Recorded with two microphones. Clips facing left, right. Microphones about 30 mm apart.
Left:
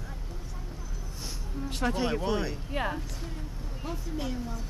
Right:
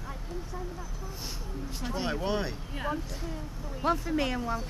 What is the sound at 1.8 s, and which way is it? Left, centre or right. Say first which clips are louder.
Speech: left 7 dB; left.